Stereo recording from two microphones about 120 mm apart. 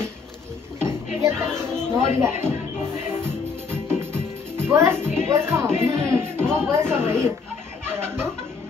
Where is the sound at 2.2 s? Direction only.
20° right (ahead or behind).